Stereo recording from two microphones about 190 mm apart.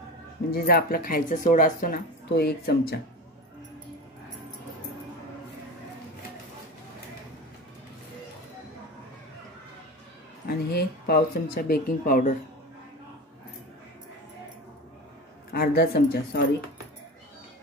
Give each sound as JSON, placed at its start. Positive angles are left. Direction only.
{"t": 0.5, "sound": "speech", "side_deg": 55}
{"t": 10.4, "sound": "speech", "side_deg": 55}
{"t": 15.5, "sound": "speech", "side_deg": 55}